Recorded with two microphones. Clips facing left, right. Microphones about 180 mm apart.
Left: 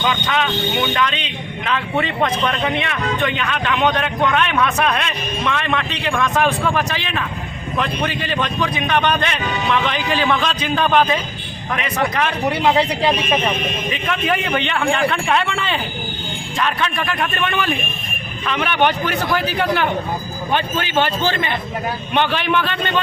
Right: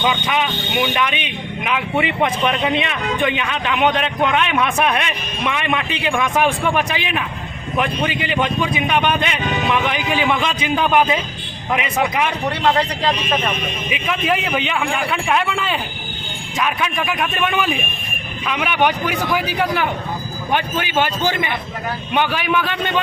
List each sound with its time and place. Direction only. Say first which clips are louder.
0.0 s speech: even; 15° right (ahead or behind)
12.5 s speech: left 3 dB; 10° left (ahead or behind)
13.9 s speech: right 2 dB; 5° right (ahead or behind)